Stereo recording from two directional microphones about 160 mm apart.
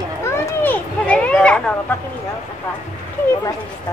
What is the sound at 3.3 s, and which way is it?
Speech, 20° left (ahead or behind).